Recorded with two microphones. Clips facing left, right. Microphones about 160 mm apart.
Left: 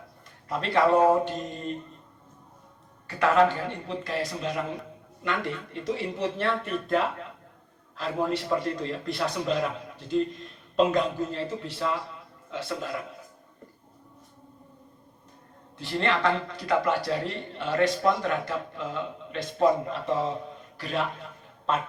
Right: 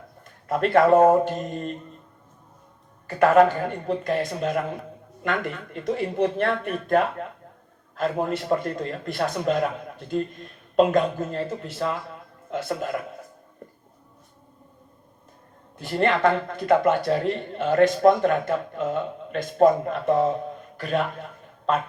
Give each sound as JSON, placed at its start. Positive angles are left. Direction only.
{"t": 0.4, "sound": "a man's voice", "side_deg": -50}
{"t": 3.2, "sound": "a man's voice", "side_deg": -50}
{"t": 15.8, "sound": "a man's voice", "side_deg": -45}